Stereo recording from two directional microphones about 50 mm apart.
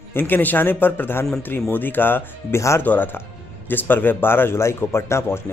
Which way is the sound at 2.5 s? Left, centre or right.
Left.